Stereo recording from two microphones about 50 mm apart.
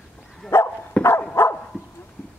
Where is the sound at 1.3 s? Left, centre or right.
Left.